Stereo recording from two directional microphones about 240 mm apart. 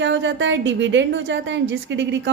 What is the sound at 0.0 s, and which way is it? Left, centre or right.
A woman's voice, right.